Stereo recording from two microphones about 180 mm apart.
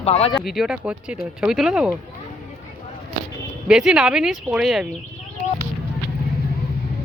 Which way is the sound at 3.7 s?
5° right (ahead or behind).